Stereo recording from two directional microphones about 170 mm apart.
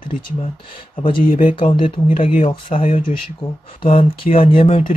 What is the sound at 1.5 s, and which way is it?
Speech, 30° left (ahead or behind).